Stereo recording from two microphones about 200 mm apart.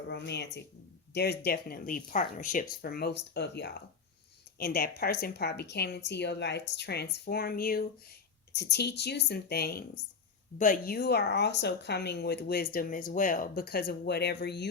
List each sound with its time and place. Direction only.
0.1 s a woman's voice: 55° left (ahead or behind)